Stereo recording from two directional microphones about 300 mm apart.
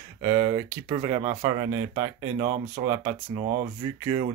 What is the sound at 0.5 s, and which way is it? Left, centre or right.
Speech, centre.